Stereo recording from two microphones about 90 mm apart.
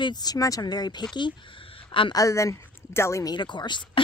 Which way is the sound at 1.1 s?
70° left (ahead or behind).